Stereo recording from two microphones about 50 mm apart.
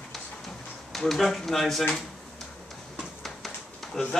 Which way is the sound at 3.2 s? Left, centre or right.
Centre.